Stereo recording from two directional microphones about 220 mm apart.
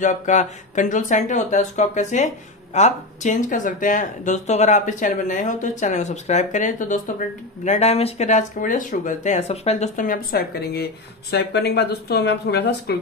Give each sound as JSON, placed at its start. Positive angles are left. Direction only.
{"t": 0.0, "sound": "speech", "side_deg": 35}